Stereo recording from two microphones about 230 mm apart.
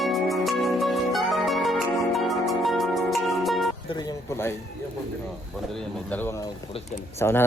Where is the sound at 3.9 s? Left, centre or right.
Centre.